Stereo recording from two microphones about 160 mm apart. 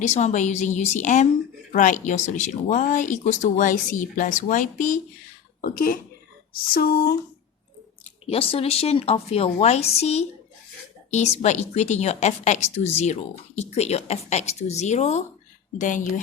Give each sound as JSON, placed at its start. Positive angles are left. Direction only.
{"t": 0.0, "sound": "speech", "side_deg": 45}
{"t": 5.6, "sound": "speech", "side_deg": 65}
{"t": 8.0, "sound": "speech", "side_deg": 35}